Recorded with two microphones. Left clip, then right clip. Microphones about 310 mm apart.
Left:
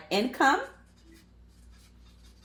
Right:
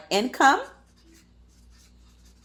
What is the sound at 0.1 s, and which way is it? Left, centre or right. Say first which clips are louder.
Speech: right 5 dB; right.